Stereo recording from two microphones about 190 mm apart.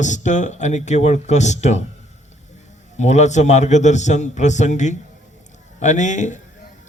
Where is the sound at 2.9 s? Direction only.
40° left (ahead or behind).